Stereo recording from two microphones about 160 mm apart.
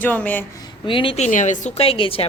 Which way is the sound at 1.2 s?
50° left (ahead or behind).